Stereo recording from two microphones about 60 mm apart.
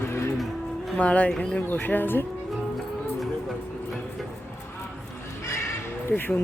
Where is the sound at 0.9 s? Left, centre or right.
Left.